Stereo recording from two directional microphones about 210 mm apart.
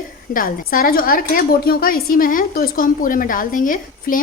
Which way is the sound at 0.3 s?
40° left (ahead or behind).